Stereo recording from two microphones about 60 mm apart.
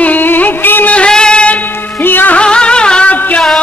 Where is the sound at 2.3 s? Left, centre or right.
Centre.